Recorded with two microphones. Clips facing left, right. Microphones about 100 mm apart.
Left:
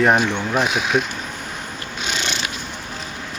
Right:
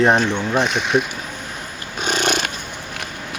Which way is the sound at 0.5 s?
5° left (ahead or behind).